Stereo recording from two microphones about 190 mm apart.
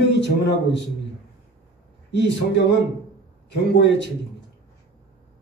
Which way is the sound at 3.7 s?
65° left (ahead or behind).